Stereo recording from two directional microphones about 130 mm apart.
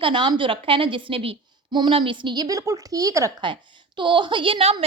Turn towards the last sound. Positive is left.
turn(degrees=-45)  # may be behind; listen again after turning